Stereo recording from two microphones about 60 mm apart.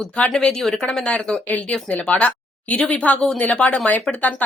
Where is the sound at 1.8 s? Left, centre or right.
Left.